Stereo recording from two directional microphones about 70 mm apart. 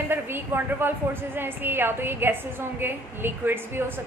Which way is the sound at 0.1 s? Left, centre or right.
Right.